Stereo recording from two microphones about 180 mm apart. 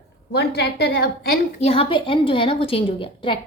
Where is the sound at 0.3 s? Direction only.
65° left (ahead or behind).